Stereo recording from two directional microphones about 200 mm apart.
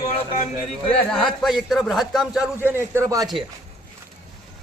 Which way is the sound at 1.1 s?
5° left (ahead or behind).